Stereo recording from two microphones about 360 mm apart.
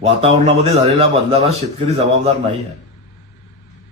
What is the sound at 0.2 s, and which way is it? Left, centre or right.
Speech, centre.